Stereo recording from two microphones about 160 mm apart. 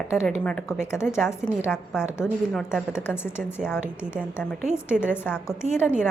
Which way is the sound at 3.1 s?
15° left (ahead or behind).